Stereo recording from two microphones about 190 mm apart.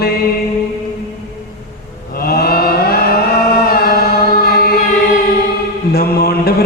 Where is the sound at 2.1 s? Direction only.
55° left (ahead or behind).